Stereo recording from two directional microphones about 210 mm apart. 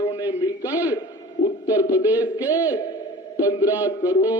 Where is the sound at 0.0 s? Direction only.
20° left (ahead or behind).